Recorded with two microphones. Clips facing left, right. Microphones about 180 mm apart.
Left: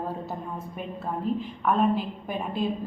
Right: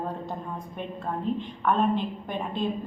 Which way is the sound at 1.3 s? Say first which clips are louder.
Left 1 dB; 5° left (ahead or behind).